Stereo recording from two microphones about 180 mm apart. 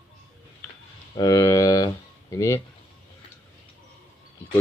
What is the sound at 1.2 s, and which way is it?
Speech, 20° left (ahead or behind).